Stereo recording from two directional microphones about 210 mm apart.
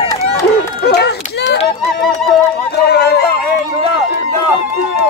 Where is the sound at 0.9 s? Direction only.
50° left (ahead or behind).